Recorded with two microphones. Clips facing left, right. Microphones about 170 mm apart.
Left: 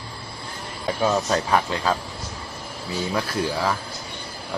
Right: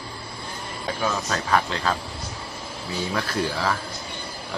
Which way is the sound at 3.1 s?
15° left (ahead or behind).